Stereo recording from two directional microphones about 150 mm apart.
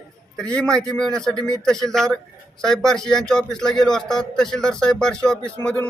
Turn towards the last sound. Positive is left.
turn(degrees=10)  # may be behind; listen again after turning